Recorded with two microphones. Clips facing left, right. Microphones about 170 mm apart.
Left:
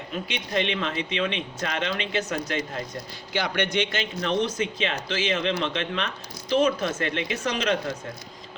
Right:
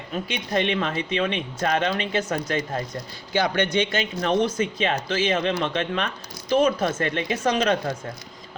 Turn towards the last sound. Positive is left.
turn(degrees=-50)  # may be behind; listen again after turning